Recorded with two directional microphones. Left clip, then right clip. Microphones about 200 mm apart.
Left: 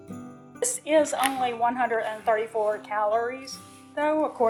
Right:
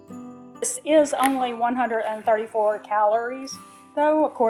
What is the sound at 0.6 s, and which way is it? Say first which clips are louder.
A woman's voice: right 3 dB; 30° right (ahead or behind).